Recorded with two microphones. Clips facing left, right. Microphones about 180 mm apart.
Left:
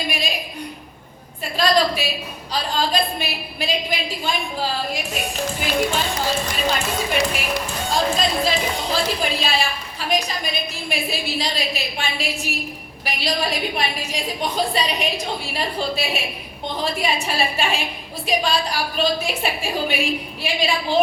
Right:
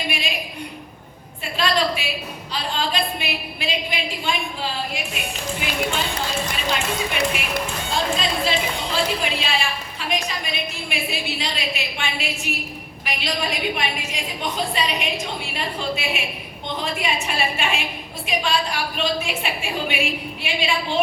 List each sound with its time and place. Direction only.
1.5 s a woman's voice: 40° left (ahead or behind)